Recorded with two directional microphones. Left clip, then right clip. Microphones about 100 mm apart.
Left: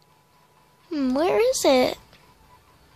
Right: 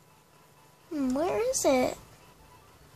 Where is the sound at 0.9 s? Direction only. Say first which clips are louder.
Left 7 dB; 45° left (ahead or behind).